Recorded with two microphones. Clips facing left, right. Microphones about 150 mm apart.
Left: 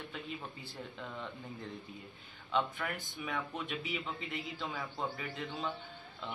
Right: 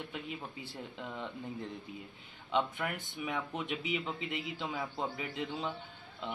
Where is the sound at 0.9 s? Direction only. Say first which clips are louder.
Right 3 dB; 15° right (ahead or behind).